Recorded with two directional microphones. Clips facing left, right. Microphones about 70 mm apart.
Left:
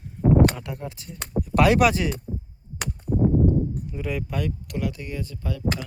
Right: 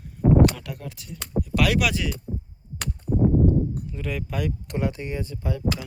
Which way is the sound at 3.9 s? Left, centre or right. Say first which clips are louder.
Left 3 dB; centre.